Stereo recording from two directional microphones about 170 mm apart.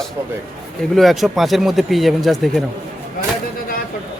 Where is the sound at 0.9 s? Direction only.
Centre (ahead or behind).